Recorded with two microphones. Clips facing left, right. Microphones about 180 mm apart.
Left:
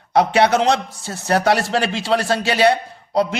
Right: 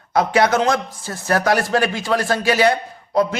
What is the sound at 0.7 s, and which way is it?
Speech, 75° left (ahead or behind).